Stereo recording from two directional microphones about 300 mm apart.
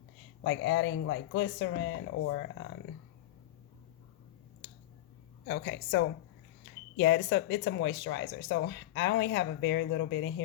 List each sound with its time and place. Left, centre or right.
0.4 s speech: left
5.5 s speech: left